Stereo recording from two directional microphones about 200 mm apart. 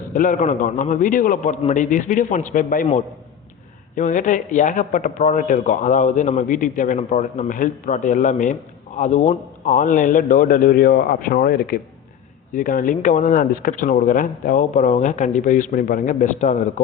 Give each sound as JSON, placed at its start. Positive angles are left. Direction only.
{"t": 0.1, "sound": "a man's voice", "side_deg": 40}